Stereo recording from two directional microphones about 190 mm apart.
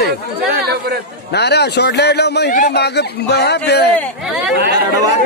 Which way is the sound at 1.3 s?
60° left (ahead or behind).